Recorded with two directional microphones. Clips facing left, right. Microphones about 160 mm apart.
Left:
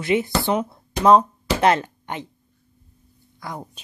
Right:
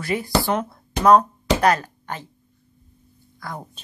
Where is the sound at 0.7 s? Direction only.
25° left (ahead or behind).